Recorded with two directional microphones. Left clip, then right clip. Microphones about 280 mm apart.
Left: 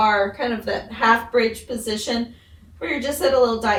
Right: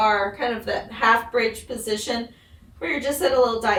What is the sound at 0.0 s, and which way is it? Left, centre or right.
A woman's voice, centre.